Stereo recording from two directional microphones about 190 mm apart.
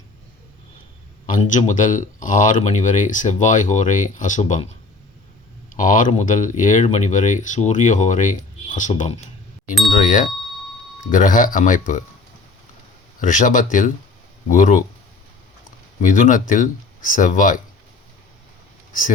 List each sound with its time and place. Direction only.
1.3 s speech: 40° left (ahead or behind)
9.6 s speech: centre (ahead or behind)
10.0 s speech: 45° left (ahead or behind)
13.1 s speech: 45° left (ahead or behind)
16.0 s speech: 40° left (ahead or behind)